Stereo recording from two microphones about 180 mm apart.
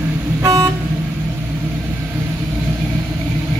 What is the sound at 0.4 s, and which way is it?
Vehicle, 20° right (ahead or behind).